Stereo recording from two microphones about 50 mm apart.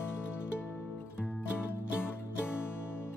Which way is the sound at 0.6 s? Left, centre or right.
Left.